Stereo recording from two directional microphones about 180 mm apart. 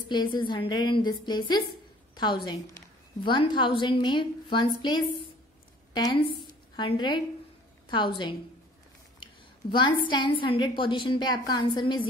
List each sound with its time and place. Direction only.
0.1 s a woman's voice: 25° left (ahead or behind)
9.2 s a sound: 25° left (ahead or behind)
10.0 s a woman's voice: 25° left (ahead or behind)